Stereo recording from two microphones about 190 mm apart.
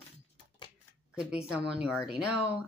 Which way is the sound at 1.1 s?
5° right (ahead or behind).